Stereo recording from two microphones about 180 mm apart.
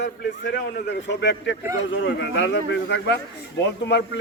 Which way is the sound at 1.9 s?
85° left.